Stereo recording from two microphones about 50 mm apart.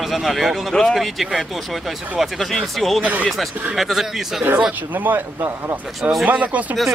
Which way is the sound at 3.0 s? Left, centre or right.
Right.